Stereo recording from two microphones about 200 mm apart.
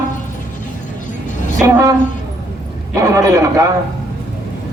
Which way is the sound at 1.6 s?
15° right (ahead or behind).